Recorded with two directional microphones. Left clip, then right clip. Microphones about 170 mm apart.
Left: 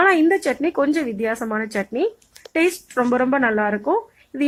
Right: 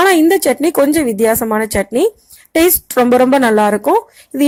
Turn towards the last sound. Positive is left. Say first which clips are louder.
# right 8 dB
turn(degrees=-35)  # may be behind; listen again after turning